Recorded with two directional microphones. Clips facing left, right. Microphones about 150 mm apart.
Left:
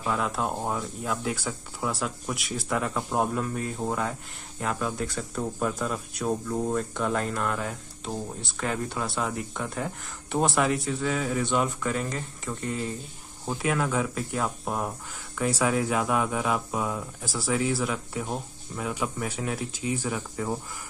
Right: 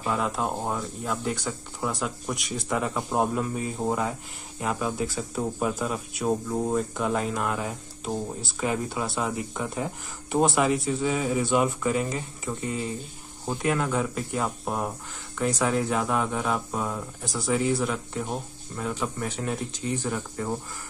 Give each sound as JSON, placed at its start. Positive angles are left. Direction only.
{"t": 0.0, "sound": "speech", "side_deg": 0}